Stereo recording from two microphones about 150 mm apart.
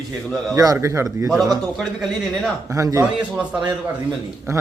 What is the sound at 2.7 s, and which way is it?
Speech, 20° right (ahead or behind).